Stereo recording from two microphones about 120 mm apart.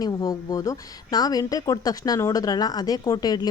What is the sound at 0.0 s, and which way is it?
Speech, 30° left (ahead or behind).